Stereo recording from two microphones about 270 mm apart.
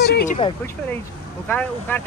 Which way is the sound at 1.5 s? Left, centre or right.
Centre.